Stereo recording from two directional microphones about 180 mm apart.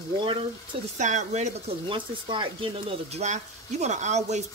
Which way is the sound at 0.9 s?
40° right (ahead or behind).